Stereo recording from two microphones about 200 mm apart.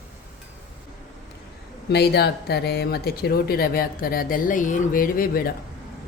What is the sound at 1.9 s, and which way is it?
Speech, 55° left (ahead or behind).